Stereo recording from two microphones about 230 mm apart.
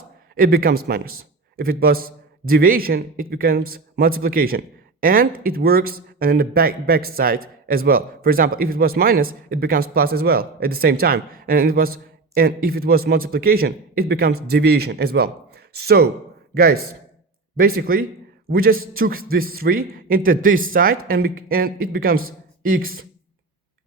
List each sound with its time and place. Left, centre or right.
0.3 s a man's voice: right
17.7 s a man's voice: right